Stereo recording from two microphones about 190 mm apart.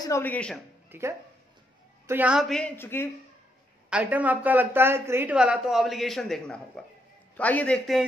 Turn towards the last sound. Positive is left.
turn(degrees=5)  # may be behind; listen again after turning